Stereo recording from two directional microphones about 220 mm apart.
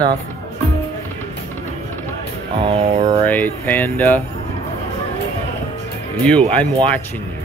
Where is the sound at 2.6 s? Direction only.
25° right (ahead or behind).